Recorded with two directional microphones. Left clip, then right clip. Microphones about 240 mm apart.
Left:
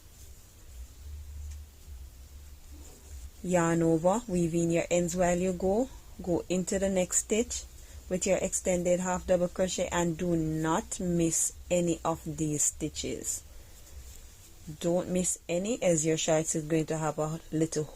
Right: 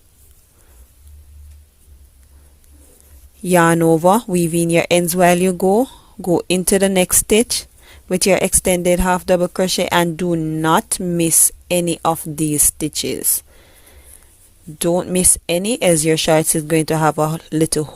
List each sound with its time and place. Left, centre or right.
3.5 s speech: right
14.8 s speech: right